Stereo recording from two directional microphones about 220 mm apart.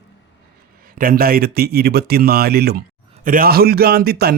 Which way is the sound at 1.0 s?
40° right (ahead or behind).